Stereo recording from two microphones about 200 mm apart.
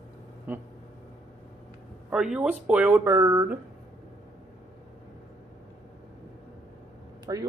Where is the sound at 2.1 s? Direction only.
5° right (ahead or behind).